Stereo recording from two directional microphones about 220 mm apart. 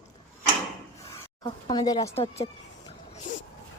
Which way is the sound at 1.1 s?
20° left (ahead or behind).